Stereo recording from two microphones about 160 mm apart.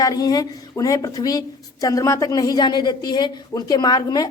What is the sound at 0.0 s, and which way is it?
Speech, 25° left (ahead or behind).